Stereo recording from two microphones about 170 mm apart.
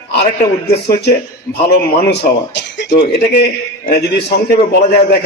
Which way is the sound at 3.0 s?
65° left (ahead or behind).